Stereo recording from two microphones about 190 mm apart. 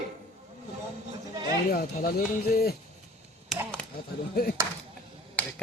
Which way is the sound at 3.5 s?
Centre (ahead or behind).